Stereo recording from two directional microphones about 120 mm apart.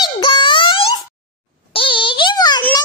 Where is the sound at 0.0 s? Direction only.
40° left (ahead or behind).